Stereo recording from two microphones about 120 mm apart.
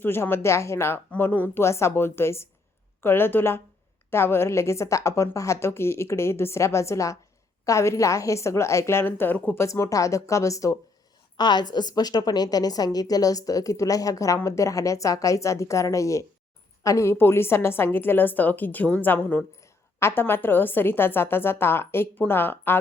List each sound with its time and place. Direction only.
0.0 s a woman's voice: 20° left (ahead or behind)
9.6 s a woman's voice: 25° left (ahead or behind)
11.3 s a woman's voice: 35° left (ahead or behind); by 22.8 s 15° left (ahead or behind)